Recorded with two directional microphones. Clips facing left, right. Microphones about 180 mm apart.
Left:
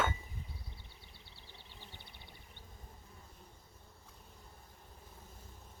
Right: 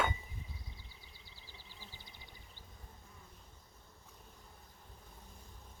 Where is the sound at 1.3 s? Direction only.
65° left (ahead or behind).